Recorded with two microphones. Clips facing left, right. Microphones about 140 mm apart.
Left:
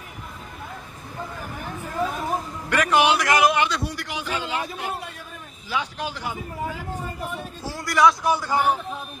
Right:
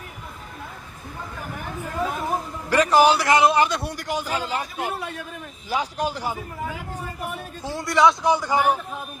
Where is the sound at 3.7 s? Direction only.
55° right (ahead or behind).